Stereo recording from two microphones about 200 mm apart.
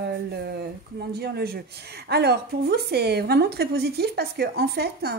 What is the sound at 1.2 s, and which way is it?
A woman's voice, 55° right (ahead or behind).